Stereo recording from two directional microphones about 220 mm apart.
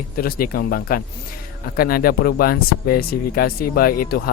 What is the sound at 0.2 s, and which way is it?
A man's voice, 40° left (ahead or behind).